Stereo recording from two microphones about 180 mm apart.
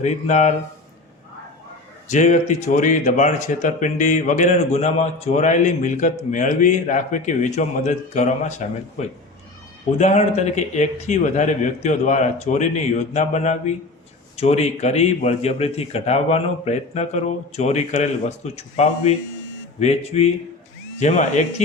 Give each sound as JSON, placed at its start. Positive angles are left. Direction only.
{"t": 0.0, "sound": "a man's voice", "side_deg": 40}
{"t": 2.0, "sound": "a man's voice", "side_deg": 45}